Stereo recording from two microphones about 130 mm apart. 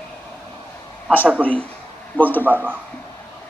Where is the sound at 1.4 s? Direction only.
10° left (ahead or behind).